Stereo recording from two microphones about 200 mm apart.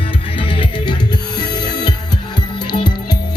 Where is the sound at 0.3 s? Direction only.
25° left (ahead or behind).